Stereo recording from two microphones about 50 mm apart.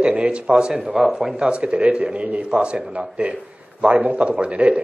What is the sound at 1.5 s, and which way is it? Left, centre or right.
Speech, right.